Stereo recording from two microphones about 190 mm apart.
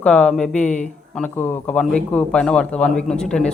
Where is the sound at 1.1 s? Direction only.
10° left (ahead or behind).